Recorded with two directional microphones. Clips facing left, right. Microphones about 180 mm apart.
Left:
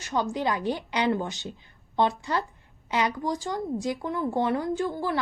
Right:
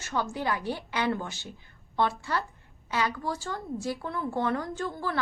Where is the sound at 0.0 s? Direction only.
15° left (ahead or behind).